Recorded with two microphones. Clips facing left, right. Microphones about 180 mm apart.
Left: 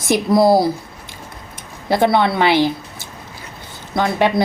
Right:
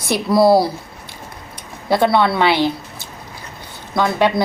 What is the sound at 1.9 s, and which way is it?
Speech, 20° left (ahead or behind).